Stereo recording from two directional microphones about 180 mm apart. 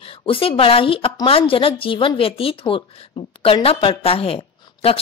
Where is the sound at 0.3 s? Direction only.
30° left (ahead or behind).